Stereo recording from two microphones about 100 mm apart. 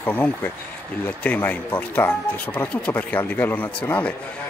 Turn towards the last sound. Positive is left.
turn(degrees=15)  # may be behind; listen again after turning